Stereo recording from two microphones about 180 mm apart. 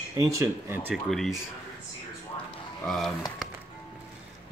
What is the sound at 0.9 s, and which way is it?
Speech, centre (ahead or behind).